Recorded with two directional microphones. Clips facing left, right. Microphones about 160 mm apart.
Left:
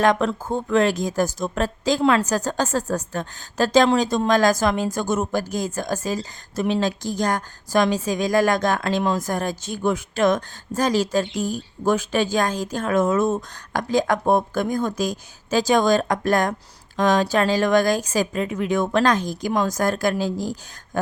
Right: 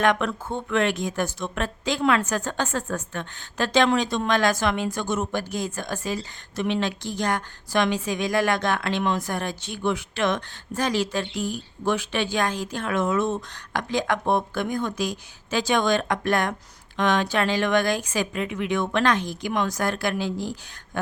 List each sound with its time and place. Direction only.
0.0 s a woman's voice: 35° left (ahead or behind)